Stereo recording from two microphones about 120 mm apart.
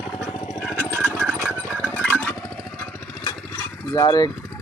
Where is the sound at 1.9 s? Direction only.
15° left (ahead or behind).